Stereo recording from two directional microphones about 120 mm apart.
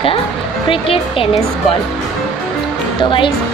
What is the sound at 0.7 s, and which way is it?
Speech, 50° left (ahead or behind).